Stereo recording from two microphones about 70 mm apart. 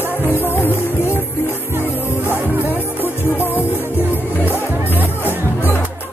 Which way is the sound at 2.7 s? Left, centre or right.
Left.